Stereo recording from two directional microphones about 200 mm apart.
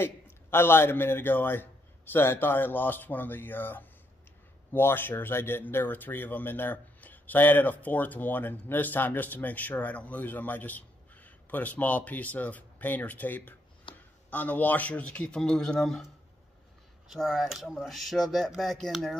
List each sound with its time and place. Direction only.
0.0 s a man's voice: 10° left (ahead or behind)
13.9 s a sound: 25° left (ahead or behind)
14.3 s speech: 10° left (ahead or behind)
17.1 s speech: centre (ahead or behind)